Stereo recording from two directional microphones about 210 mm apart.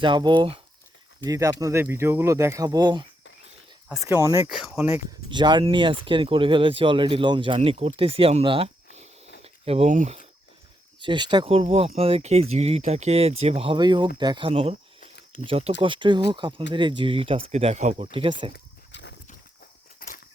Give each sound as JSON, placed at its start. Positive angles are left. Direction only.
{"t": 0.0, "sound": "speech", "side_deg": -20}
{"t": 4.4, "sound": "speech", "side_deg": -5}
{"t": 5.3, "sound": "speech", "side_deg": -20}
{"t": 11.0, "sound": "speech", "side_deg": -20}
{"t": 18.5, "sound": "walk", "side_deg": 55}